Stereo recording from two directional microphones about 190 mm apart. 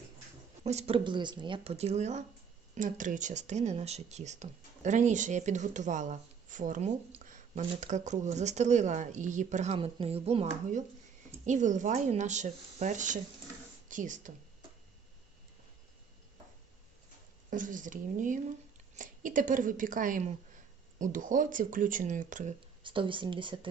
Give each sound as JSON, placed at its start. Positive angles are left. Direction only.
{"t": 0.6, "sound": "speech", "side_deg": -35}
{"t": 17.5, "sound": "speech", "side_deg": -45}
{"t": 22.8, "sound": "speech", "side_deg": -25}